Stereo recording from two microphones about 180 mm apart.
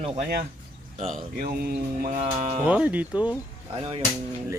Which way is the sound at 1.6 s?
50° right (ahead or behind).